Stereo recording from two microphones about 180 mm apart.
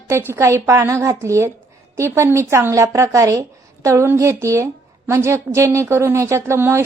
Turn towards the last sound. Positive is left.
turn(degrees=-15)  # may be behind; listen again after turning